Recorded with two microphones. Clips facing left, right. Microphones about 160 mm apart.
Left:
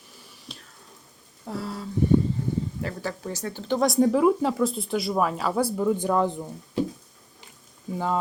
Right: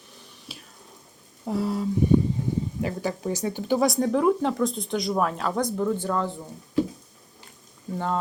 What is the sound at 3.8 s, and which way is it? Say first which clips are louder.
Speech: left 4 dB; centre (ahead or behind).